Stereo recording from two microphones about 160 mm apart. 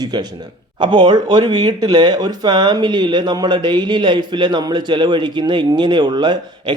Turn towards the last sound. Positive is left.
turn(degrees=-30)  # may be behind; listen again after turning